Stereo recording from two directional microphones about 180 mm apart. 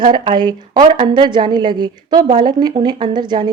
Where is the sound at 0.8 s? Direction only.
35° right (ahead or behind).